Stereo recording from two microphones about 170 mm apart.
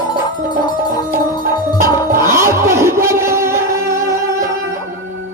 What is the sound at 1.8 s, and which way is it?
Music, 15° right (ahead or behind).